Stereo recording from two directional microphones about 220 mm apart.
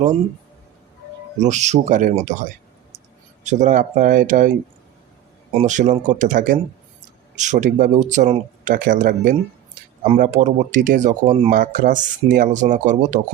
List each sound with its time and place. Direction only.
1.4 s speech: 30° right (ahead or behind)
5.5 s speech: 35° right (ahead or behind)